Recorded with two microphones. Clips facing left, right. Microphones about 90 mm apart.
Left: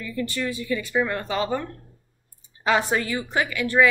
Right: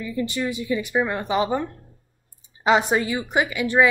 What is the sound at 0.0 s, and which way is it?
A woman's voice, 20° right (ahead or behind).